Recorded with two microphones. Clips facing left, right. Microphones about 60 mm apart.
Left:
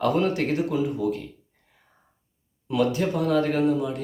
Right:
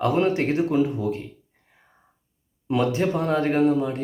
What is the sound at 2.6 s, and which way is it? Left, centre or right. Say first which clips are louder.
Speech: right 1 dB; right.